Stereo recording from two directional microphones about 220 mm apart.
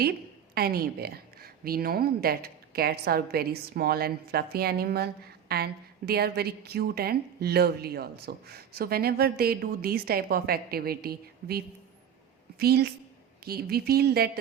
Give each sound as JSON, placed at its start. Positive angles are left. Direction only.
{"t": 0.5, "sound": "a woman's voice", "side_deg": -45}